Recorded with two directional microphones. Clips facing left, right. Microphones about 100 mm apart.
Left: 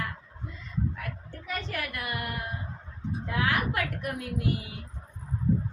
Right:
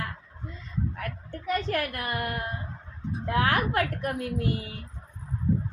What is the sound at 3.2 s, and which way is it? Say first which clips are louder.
A woman's voice: right 4 dB; 50° right (ahead or behind).